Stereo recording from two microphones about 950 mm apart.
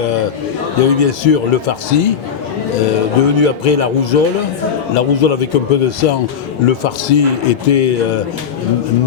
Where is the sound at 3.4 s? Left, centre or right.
Left.